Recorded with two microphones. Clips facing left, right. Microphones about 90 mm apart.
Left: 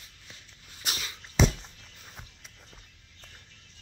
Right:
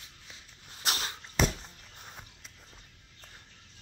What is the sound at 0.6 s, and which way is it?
Dog, 60° right (ahead or behind).